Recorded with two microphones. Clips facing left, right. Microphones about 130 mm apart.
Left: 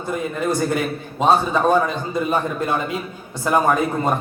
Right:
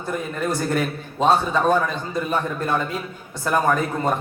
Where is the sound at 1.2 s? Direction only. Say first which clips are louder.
Left 2 dB; 15° left (ahead or behind).